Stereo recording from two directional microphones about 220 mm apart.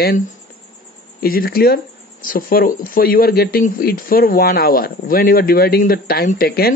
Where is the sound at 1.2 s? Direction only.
40° left (ahead or behind).